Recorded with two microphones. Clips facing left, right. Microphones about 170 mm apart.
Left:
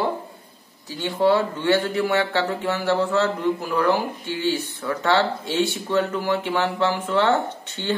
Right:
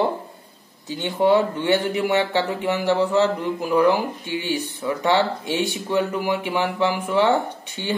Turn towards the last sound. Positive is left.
turn(degrees=-15)  # may be behind; listen again after turning